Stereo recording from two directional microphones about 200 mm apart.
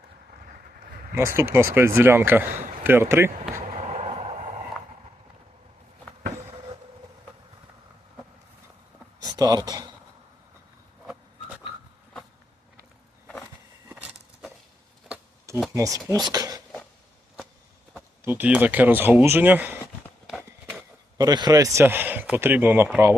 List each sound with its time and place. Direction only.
1.1 s a man's voice: 15° right (ahead or behind)
3.6 s a sound: 35° right (ahead or behind)
9.2 s speech: 20° right (ahead or behind)
11.0 s pig: 5° right (ahead or behind)
15.1 s a sound: 15° right (ahead or behind)
15.7 s a man's voice: 15° right (ahead or behind)
17.9 s speech: 10° right (ahead or behind)
20.2 s a sound: 5° right (ahead or behind)
21.2 s a man's voice: 20° right (ahead or behind)